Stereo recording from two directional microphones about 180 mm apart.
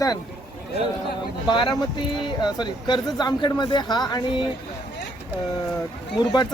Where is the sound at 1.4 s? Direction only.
25° left (ahead or behind).